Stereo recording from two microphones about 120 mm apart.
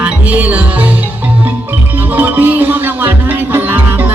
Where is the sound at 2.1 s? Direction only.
15° right (ahead or behind).